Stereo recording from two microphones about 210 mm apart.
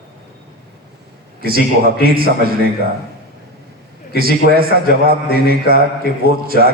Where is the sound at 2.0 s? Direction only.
45° right (ahead or behind).